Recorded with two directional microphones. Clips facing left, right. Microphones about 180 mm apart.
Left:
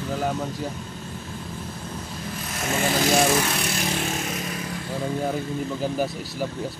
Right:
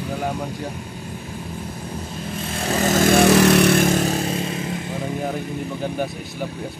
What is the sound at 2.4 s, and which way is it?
Vehicle, 30° right (ahead or behind).